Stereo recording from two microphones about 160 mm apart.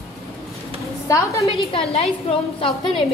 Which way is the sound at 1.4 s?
35° left (ahead or behind).